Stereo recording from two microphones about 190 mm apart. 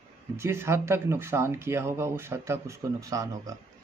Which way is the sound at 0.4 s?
15° right (ahead or behind).